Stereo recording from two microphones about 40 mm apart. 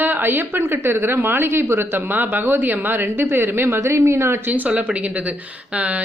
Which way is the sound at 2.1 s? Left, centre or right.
Right.